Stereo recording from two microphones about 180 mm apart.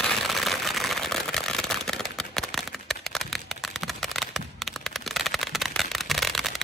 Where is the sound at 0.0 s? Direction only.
Centre (ahead or behind).